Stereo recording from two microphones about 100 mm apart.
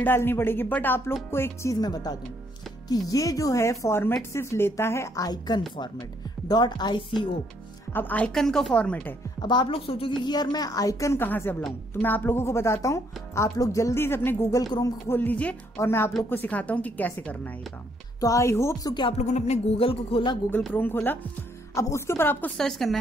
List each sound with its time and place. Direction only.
0.0 s a woman's voice: 20° left (ahead or behind)
1.8 s a woman's voice: 45° left (ahead or behind)
7.9 s speech: 15° left (ahead or behind)
8.3 s a woman's voice: 5° left (ahead or behind)
9.4 s speech: 50° left (ahead or behind)
9.8 s speech: 65° left (ahead or behind)
10.2 s a woman's voice: 45° left (ahead or behind)
11.2 s a woman's voice: 20° left (ahead or behind)
14.6 s a woman's voice: 40° left (ahead or behind)
15.0 s a woman's voice: 20° left (ahead or behind)
18.2 s a woman's voice: 30° left (ahead or behind)
19.4 s speech: 80° left
20.7 s a woman's voice: 20° left (ahead or behind)
22.6 s a woman's voice: centre (ahead or behind)